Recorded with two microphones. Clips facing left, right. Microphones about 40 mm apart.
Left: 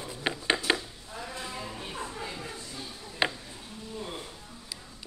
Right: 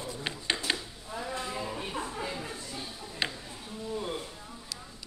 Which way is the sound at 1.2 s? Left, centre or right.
Centre.